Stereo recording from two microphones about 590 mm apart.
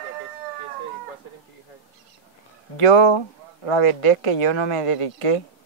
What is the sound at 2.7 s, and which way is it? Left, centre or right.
A man's voice, left.